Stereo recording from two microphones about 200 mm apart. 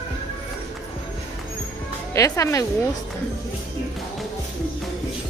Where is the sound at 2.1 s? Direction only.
15° left (ahead or behind).